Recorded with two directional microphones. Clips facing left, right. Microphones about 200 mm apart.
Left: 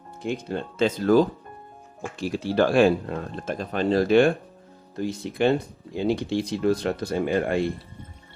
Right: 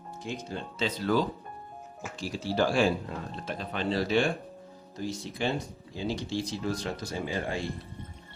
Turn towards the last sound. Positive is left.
turn(degrees=60)  # may be behind; listen again after turning